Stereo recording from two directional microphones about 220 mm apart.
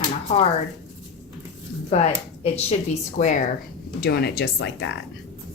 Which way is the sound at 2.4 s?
30° left (ahead or behind).